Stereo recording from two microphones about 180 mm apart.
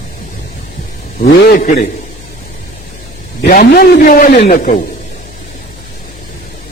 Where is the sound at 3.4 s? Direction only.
55° left (ahead or behind).